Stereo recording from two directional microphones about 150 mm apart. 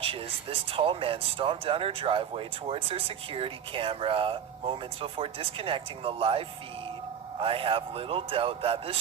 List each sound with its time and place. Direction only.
0.7 s speech: 35° right (ahead or behind)